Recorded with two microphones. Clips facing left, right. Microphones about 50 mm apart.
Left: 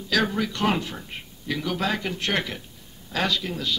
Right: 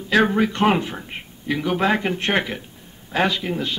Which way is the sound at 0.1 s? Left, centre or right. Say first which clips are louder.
Right 6 dB; right.